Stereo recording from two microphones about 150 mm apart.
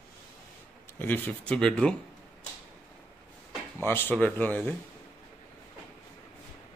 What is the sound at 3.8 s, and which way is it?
Speech, 15° left (ahead or behind).